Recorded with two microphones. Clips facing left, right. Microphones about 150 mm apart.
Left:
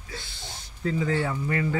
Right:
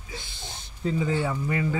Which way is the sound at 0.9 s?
20° right (ahead or behind).